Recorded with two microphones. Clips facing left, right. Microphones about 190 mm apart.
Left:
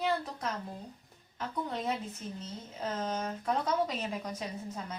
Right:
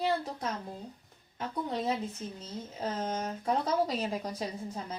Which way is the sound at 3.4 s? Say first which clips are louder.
Right 2 dB; 35° right (ahead or behind).